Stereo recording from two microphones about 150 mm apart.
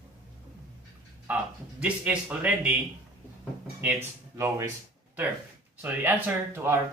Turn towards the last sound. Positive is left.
turn(degrees=-15)  # may be behind; listen again after turning